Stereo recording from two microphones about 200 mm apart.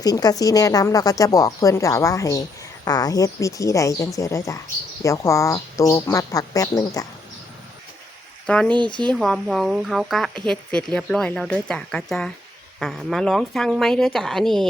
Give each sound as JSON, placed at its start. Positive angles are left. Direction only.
{"t": 0.0, "sound": "a woman's voice", "side_deg": 20}
{"t": 8.4, "sound": "speech", "side_deg": 5}